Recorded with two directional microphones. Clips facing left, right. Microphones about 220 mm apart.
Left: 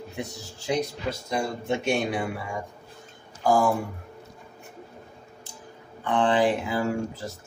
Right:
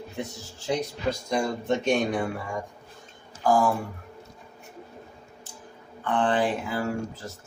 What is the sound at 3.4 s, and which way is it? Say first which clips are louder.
Speech: even; 10° left (ahead or behind).